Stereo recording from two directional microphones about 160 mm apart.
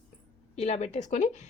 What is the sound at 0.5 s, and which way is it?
Speech, 45° left (ahead or behind).